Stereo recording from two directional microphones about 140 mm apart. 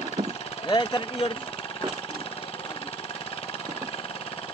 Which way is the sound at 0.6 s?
35° left (ahead or behind).